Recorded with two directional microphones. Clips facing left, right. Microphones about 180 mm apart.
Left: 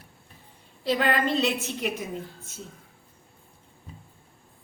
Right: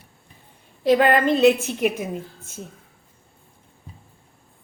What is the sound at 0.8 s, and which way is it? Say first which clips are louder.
Speech: right 8 dB; 55° right (ahead or behind).